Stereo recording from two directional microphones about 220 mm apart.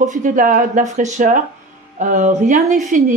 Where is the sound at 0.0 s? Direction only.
35° right (ahead or behind).